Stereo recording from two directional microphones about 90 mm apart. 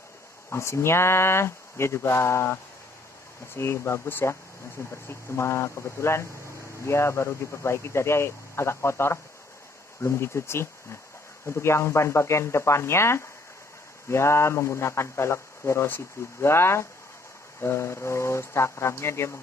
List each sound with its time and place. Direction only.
0.5 s a man's voice: 30° left (ahead or behind)